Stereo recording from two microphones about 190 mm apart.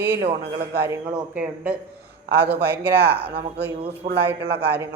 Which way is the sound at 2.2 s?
60° right (ahead or behind).